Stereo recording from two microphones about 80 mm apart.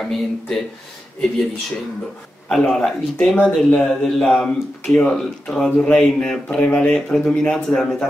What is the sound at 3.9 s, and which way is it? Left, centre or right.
Speech, centre.